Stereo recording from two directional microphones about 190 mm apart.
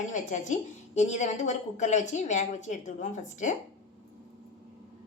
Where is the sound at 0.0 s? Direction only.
40° left (ahead or behind).